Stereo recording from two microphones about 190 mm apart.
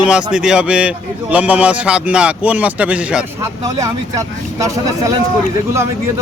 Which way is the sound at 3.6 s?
20° right (ahead or behind).